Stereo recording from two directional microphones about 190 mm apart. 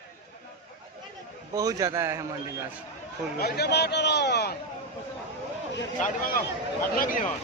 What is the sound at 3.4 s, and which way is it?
A man's voice, 60° left (ahead or behind).